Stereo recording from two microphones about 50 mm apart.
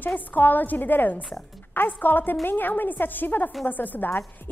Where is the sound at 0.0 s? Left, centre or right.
Left.